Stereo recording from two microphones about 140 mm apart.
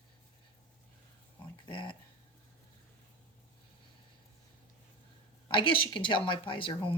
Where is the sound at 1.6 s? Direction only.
35° left (ahead or behind).